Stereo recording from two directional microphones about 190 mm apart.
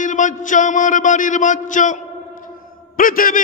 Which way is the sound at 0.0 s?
40° left (ahead or behind).